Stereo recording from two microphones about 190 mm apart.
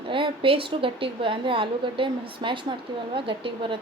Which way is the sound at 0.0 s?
25° right (ahead or behind).